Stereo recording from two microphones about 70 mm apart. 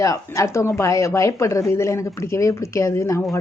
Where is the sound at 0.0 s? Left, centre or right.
Left.